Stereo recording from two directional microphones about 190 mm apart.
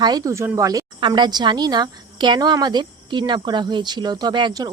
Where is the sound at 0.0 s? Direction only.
20° right (ahead or behind).